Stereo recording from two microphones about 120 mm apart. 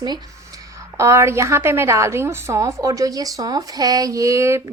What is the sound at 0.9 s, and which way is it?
A woman's voice, 25° right (ahead or behind).